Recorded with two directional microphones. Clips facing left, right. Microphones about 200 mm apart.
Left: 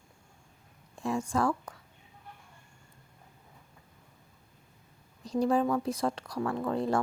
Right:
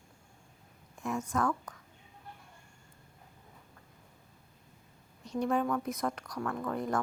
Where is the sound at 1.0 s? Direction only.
30° left (ahead or behind).